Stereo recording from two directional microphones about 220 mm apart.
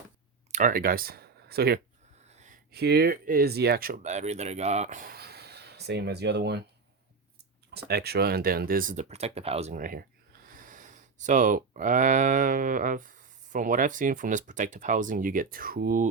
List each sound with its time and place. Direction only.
0.5 s speech: 40° right (ahead or behind)
2.2 s a sound: 30° right (ahead or behind)
2.7 s speech: 45° right (ahead or behind)
7.7 s speech: 45° right (ahead or behind)